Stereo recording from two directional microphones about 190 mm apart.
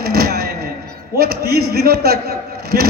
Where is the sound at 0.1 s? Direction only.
55° right (ahead or behind).